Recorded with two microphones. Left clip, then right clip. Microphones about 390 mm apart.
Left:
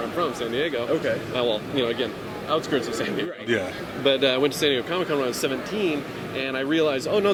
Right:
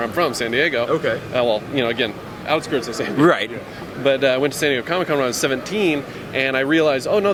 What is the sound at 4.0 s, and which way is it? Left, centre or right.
Speech, centre.